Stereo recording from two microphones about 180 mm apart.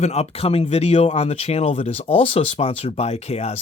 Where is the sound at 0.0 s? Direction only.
35° left (ahead or behind).